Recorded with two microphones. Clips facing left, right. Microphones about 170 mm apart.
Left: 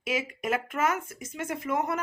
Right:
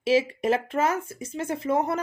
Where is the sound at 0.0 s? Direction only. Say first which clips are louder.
Right 9 dB; 30° right (ahead or behind).